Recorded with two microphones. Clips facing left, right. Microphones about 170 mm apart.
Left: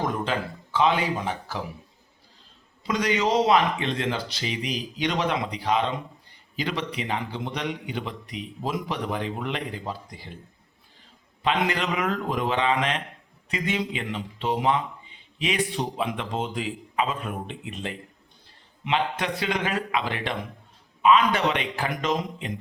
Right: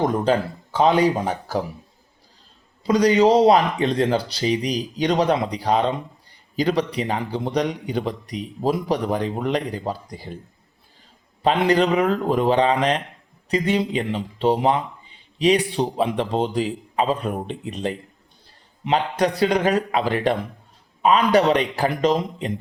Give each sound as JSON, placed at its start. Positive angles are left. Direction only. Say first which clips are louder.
{"t": 0.0, "sound": "speech", "louder": "right 7 dB", "side_deg": -40}
{"t": 2.8, "sound": "speech", "louder": "right 9 dB", "side_deg": -35}
{"t": 11.4, "sound": "speech", "louder": "right 7 dB", "side_deg": -35}